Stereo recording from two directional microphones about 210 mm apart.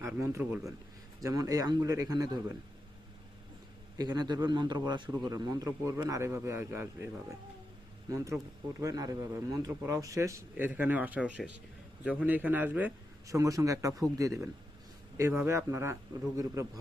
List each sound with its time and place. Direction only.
0.0 s a man's voice: 10° right (ahead or behind)
3.9 s a man's voice: 20° right (ahead or behind)
8.1 s a man's voice: 15° right (ahead or behind)